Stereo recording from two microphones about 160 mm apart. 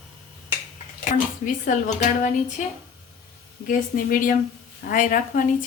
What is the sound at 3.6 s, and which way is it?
A woman's voice, 60° left (ahead or behind).